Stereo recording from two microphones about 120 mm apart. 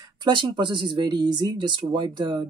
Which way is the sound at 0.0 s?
35° right (ahead or behind).